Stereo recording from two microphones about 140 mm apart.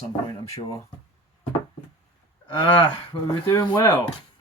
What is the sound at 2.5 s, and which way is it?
Speech, 35° left (ahead or behind).